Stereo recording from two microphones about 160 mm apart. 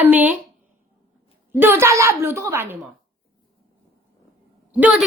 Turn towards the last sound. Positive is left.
turn(degrees=-10)  # may be behind; listen again after turning